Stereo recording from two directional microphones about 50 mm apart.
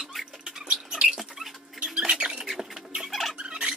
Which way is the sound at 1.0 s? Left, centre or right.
Centre.